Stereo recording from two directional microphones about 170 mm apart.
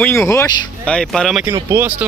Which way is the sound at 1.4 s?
15° right (ahead or behind).